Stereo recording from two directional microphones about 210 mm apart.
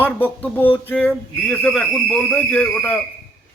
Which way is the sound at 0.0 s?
10° left (ahead or behind).